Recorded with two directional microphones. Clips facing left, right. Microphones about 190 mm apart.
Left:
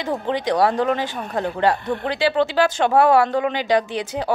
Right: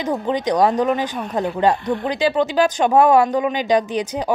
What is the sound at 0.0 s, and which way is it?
Speech, 20° right (ahead or behind).